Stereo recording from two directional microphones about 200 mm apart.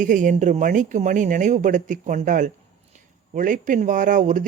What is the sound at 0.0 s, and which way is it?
Speech, 40° right (ahead or behind).